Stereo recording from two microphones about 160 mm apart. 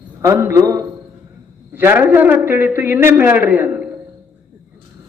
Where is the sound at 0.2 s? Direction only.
15° right (ahead or behind).